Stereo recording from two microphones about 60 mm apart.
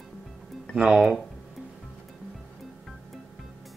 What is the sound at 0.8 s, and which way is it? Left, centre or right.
Speech, centre.